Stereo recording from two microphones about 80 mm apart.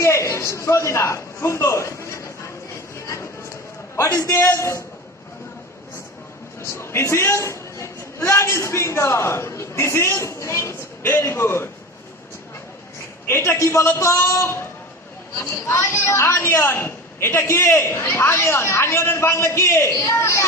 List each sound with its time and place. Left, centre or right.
0.0 s a man's voice: left
3.9 s a man's voice: left
6.6 s a man's voice: left
13.3 s a woman's voice: left
15.5 s a woman's voice: left